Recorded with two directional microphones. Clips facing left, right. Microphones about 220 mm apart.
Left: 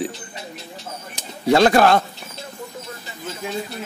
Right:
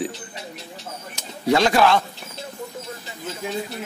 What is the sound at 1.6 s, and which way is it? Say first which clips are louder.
Speech: left 4 dB; 50° left (ahead or behind).